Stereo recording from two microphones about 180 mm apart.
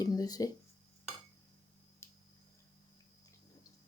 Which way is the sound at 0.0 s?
20° left (ahead or behind).